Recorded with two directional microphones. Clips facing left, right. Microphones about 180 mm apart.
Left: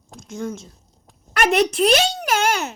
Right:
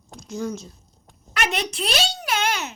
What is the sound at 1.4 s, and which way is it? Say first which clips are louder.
A child's voice: left 9 dB; 50° left (ahead or behind).